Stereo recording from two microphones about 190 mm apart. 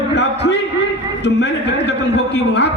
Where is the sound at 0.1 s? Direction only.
65° left (ahead or behind).